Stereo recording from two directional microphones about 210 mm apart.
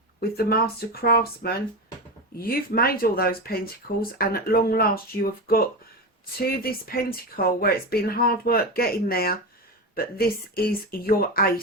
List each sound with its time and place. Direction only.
0.2 s speech: 45° left (ahead or behind)